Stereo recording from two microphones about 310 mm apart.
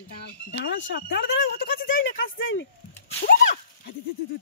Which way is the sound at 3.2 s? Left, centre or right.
Left.